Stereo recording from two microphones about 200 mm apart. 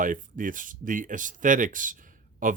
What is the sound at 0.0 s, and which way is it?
Speech, 40° right (ahead or behind).